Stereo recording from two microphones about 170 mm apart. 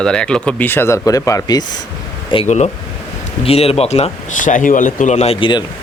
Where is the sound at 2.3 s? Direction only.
40° left (ahead or behind).